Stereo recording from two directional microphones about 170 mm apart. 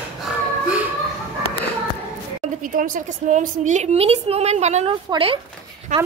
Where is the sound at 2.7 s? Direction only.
50° right (ahead or behind); by 5.4 s 30° right (ahead or behind).